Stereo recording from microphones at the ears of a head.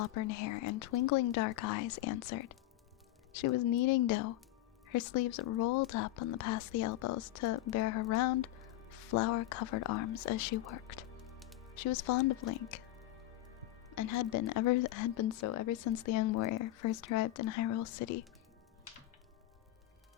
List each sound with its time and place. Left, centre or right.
0.0 s a woman's voice: left
13.9 s a woman's voice: left